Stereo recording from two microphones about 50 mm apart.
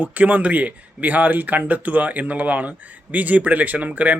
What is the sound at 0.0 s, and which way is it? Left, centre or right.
Speech, right.